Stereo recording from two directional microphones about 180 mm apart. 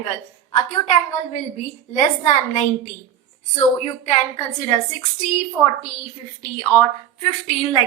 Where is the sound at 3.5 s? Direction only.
40° left (ahead or behind).